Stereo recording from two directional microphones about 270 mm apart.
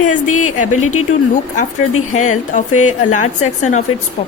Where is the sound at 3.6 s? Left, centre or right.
Left.